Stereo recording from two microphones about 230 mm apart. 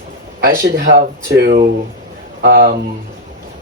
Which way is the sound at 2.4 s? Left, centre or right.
Right.